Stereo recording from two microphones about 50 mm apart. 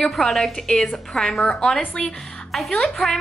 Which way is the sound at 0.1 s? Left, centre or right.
Centre.